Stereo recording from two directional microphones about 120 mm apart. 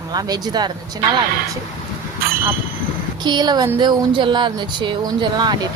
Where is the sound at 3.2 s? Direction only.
35° right (ahead or behind).